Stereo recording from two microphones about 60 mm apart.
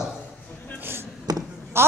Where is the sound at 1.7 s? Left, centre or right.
Right.